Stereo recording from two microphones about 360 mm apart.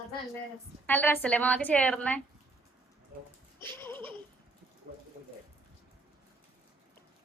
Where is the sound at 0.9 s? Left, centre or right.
Centre.